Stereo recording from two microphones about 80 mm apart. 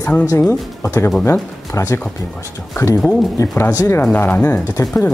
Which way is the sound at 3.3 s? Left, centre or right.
Left.